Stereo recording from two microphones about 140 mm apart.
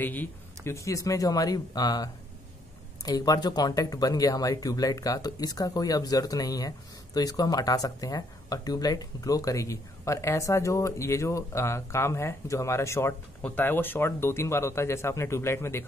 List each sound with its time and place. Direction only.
0.0 s speech: 15° left (ahead or behind)
3.1 s speech: 25° left (ahead or behind)